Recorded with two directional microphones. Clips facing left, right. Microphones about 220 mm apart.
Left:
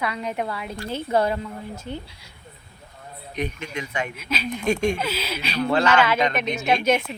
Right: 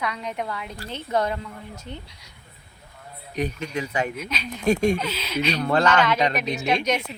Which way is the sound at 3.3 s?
35° right (ahead or behind).